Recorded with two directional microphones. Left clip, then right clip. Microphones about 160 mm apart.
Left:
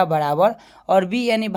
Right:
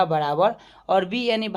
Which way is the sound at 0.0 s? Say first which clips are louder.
Left 3 dB; 35° left (ahead or behind).